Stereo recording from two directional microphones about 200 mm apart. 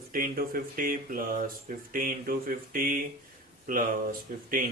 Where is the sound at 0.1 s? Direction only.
45° right (ahead or behind).